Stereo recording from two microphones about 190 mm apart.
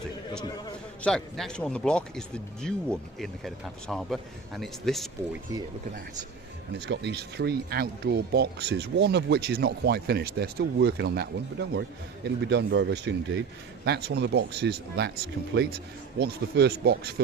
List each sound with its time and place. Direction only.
1.0 s speech: 5° left (ahead or behind)
6.7 s speech: 65° right (ahead or behind)